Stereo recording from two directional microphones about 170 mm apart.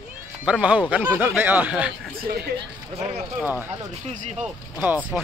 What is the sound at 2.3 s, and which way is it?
Speech, 65° right (ahead or behind).